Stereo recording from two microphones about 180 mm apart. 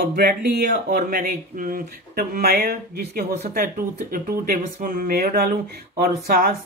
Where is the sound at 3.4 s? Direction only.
50° right (ahead or behind).